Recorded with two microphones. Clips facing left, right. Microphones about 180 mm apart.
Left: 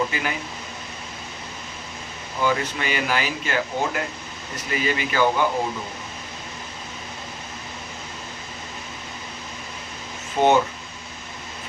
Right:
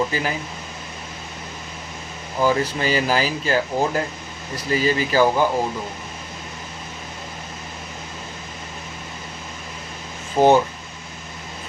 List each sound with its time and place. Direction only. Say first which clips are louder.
0.1 s speech: right 3 dB; 35° right (ahead or behind)
2.4 s speech: right 4 dB; 35° right (ahead or behind)
10.3 s speech: right 3 dB; 35° right (ahead or behind)